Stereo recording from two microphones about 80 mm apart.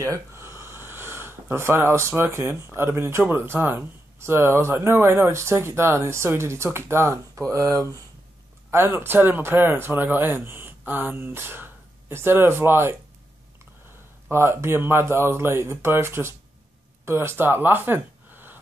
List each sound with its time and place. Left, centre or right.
0.0 s speech: right
8.7 s speech: right
14.3 s speech: right